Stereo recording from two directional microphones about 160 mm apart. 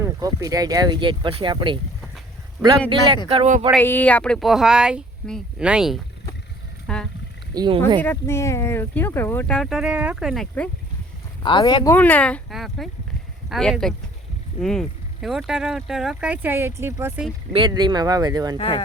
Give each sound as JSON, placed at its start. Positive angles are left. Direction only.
{"t": 0.0, "sound": "speech", "side_deg": -20}
{"t": 3.2, "sound": "speech", "side_deg": -40}
{"t": 3.8, "sound": "speech", "side_deg": 10}
{"t": 6.8, "sound": "a sound", "side_deg": 5}
{"t": 7.5, "sound": "speech", "side_deg": -25}
{"t": 8.0, "sound": "speech", "side_deg": 15}
{"t": 11.4, "sound": "speech", "side_deg": 30}
{"t": 11.9, "sound": "speech", "side_deg": 10}
{"t": 17.5, "sound": "speech", "side_deg": -30}
{"t": 18.5, "sound": "speech", "side_deg": 35}